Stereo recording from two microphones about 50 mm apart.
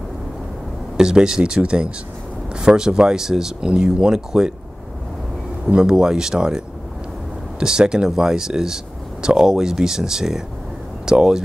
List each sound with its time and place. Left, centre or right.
0.9 s speech: centre
5.7 s speech: centre